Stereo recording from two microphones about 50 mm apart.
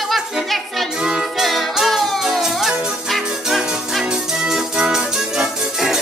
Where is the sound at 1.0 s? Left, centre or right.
Centre.